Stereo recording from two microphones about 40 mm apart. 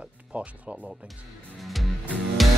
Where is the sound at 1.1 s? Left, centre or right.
Centre.